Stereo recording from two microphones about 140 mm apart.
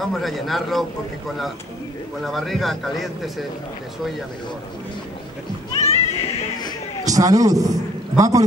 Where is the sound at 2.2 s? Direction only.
Centre (ahead or behind).